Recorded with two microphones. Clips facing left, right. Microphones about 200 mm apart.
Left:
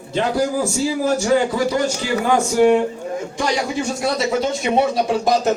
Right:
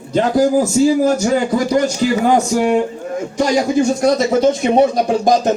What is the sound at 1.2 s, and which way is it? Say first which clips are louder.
Speech: right 2 dB; 40° right (ahead or behind).